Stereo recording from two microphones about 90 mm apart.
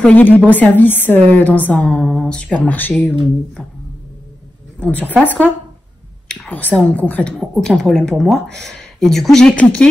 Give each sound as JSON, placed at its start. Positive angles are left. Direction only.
{"t": 0.0, "sound": "a woman's voice", "side_deg": 20}
{"t": 4.7, "sound": "a woman's voice", "side_deg": 15}
{"t": 6.5, "sound": "speech", "side_deg": 15}
{"t": 7.3, "sound": "speech", "side_deg": 5}